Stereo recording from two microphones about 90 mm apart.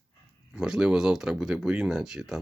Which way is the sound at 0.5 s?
5° right (ahead or behind).